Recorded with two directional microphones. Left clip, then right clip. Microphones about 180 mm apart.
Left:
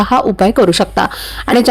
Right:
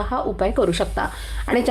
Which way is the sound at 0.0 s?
45° left (ahead or behind).